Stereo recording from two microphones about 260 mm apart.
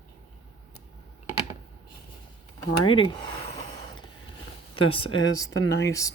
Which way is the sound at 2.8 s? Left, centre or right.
Centre.